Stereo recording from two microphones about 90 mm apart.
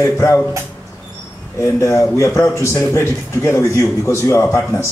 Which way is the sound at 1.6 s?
35° left (ahead or behind).